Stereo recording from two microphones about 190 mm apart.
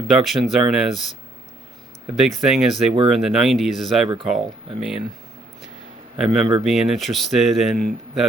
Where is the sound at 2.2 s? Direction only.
Centre (ahead or behind).